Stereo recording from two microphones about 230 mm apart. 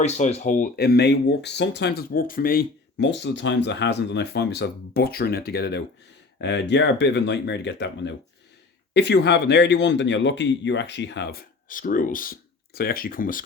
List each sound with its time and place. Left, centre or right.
0.0 s speech: left